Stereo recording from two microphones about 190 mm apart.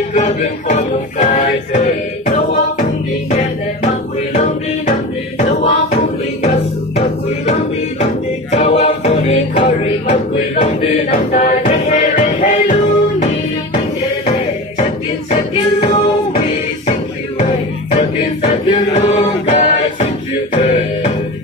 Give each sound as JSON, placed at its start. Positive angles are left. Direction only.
{"t": 0.1, "sound": "music", "side_deg": 35}
{"t": 5.4, "sound": "music", "side_deg": 35}
{"t": 7.0, "sound": "music", "side_deg": 35}
{"t": 15.8, "sound": "a sound", "side_deg": 25}
{"t": 17.9, "sound": "music", "side_deg": 35}